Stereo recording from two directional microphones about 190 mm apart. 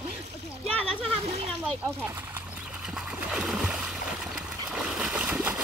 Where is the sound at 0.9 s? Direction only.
30° right (ahead or behind).